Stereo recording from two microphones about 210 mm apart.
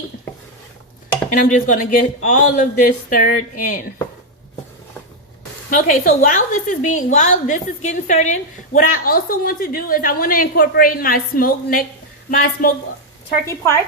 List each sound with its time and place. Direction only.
1.3 s speech: 40° left (ahead or behind)
5.7 s a woman's voice: 40° left (ahead or behind)
13.4 s a woman's voice: 10° left (ahead or behind)